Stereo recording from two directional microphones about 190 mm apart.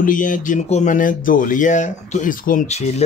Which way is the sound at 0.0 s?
45° left (ahead or behind).